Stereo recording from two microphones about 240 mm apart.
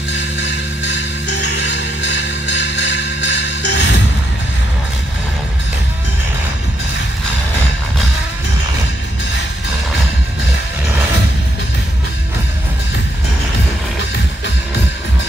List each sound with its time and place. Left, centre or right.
0.9 s music: left